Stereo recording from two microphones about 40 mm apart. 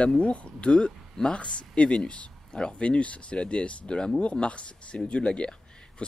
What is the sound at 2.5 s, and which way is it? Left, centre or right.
Speech, centre.